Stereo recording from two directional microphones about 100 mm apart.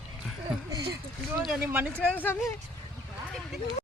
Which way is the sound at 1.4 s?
5° right (ahead or behind).